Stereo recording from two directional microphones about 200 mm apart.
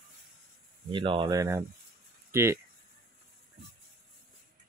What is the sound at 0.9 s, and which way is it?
Speech, 25° right (ahead or behind).